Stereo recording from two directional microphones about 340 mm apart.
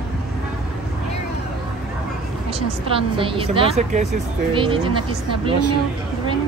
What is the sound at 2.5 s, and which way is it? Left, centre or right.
A woman's voice, centre.